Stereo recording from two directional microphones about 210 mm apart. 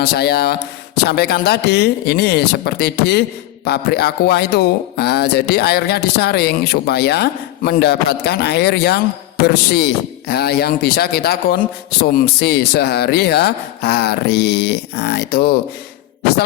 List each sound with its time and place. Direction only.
0.0 s speech: 50° left (ahead or behind)